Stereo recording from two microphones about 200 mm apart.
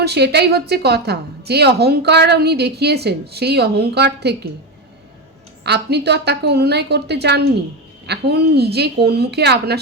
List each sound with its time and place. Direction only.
0.0 s a woman's voice: 55° right (ahead or behind)
5.6 s a woman's voice: 55° right (ahead or behind)